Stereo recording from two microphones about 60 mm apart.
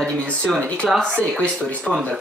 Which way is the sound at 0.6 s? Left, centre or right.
Centre.